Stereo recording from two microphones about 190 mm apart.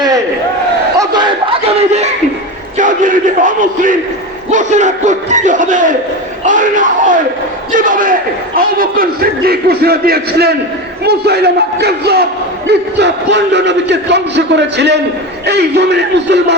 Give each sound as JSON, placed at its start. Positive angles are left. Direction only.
{"t": 0.9, "sound": "crowd", "side_deg": -20}
{"t": 2.7, "sound": "a man's voice", "side_deg": -45}